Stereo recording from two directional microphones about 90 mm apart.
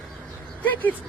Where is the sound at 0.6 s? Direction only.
20° left (ahead or behind).